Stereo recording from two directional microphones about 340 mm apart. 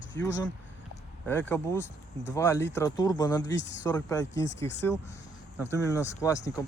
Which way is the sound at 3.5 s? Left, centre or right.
Left.